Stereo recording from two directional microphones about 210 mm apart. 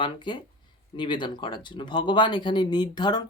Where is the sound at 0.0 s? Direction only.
20° left (ahead or behind).